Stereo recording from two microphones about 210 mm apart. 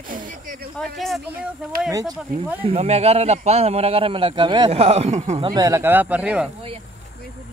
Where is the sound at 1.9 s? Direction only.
15° right (ahead or behind).